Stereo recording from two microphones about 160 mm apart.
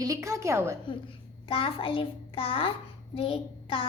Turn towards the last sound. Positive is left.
turn(degrees=35)  # may be behind; listen again after turning